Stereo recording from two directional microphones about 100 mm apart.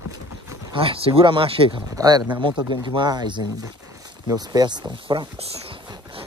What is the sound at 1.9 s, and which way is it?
Speech, 40° right (ahead or behind).